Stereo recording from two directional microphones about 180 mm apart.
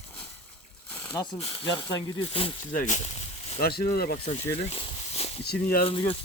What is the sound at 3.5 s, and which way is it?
Speech, 60° left (ahead or behind).